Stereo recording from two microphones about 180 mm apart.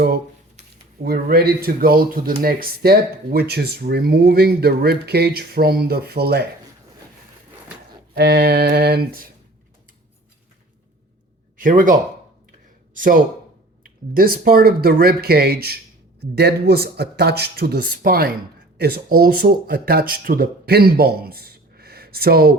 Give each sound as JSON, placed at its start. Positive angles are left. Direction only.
{"t": 1.0, "sound": "speech", "side_deg": -60}
{"t": 8.1, "sound": "speech", "side_deg": -65}
{"t": 11.5, "sound": "speech", "side_deg": -45}
{"t": 12.9, "sound": "a sound", "side_deg": -50}
{"t": 14.1, "sound": "speech", "side_deg": -55}